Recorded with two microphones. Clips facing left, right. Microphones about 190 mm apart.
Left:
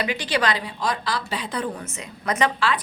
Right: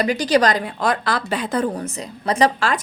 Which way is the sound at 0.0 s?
40° right (ahead or behind).